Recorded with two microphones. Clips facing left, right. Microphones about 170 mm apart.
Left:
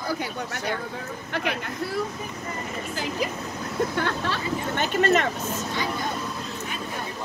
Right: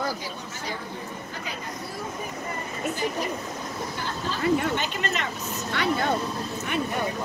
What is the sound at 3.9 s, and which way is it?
Speech, 70° left (ahead or behind).